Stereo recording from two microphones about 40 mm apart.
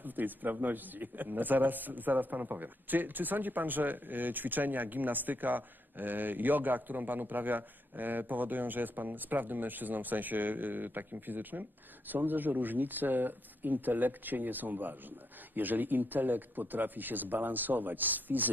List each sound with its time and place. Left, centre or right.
0.0 s a man's voice: right